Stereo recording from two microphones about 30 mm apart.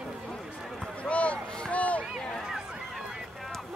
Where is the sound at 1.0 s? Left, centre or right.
Left.